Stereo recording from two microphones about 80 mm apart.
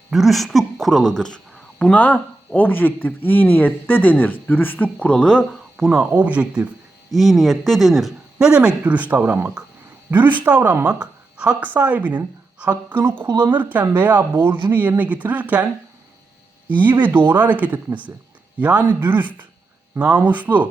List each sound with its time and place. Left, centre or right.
0.1 s a woman's voice: centre
5.8 s speech: centre
6.1 s speech: centre
7.1 s a woman's voice: centre; by 12.7 s right
12.7 s speech: right
13.2 s speech: right
13.5 s speech: right
16.6 s speech: right